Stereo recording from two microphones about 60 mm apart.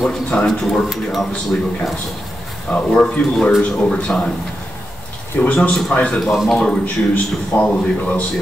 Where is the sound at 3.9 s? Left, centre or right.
Centre.